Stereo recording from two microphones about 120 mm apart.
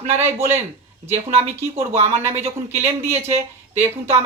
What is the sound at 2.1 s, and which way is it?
Speech, 20° right (ahead or behind).